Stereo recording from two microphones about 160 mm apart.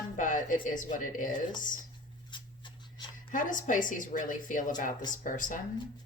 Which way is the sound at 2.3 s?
30° left (ahead or behind).